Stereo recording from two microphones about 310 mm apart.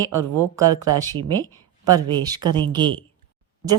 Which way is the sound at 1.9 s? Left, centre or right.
Centre.